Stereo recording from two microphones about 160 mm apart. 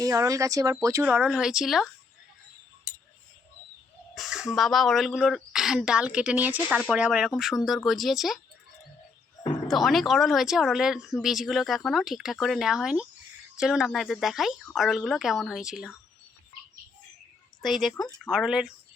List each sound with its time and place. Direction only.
0.0 s speech: 20° right (ahead or behind)
1.0 s speech: 5° right (ahead or behind)
4.1 s a sound: centre (ahead or behind)
4.5 s speech: centre (ahead or behind)
9.6 s speech: centre (ahead or behind)
17.6 s speech: centre (ahead or behind)